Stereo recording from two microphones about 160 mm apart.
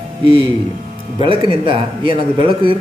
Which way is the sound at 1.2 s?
30° right (ahead or behind).